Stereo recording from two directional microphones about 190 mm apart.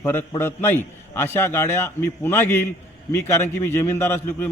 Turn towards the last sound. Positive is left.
turn(degrees=10)  # may be behind; listen again after turning